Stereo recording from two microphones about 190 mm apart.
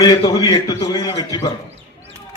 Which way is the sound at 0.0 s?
20° left (ahead or behind).